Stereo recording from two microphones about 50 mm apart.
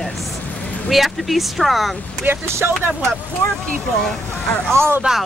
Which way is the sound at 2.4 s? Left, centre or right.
Right.